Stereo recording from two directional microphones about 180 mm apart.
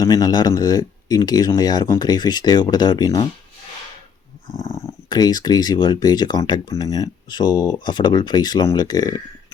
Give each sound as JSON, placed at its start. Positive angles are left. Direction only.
{"t": 0.0, "sound": "speech", "side_deg": 20}
{"t": 4.5, "sound": "speech", "side_deg": 15}